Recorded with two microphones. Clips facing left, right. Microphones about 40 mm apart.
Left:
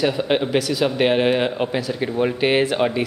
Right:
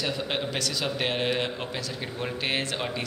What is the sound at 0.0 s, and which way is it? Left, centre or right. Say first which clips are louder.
A man's voice: left 10 dB; centre.